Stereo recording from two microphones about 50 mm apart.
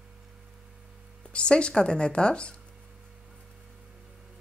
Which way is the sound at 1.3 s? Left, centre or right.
Centre.